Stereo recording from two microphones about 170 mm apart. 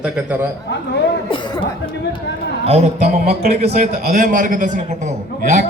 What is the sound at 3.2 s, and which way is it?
Speech, 70° right (ahead or behind).